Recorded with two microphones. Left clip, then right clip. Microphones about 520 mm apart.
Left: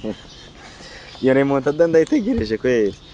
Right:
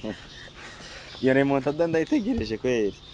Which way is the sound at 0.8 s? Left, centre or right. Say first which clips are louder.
Left 6 dB; right.